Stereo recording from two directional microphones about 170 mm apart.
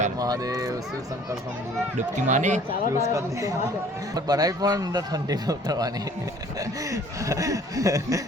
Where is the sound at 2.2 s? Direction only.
45° right (ahead or behind).